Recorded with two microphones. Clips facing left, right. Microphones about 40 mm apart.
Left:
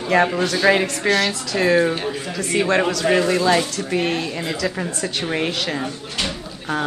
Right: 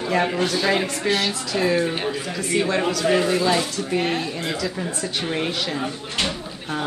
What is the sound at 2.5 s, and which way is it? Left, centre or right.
Speech, left.